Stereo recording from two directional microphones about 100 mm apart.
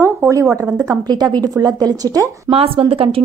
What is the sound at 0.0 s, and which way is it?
Speech, 30° right (ahead or behind).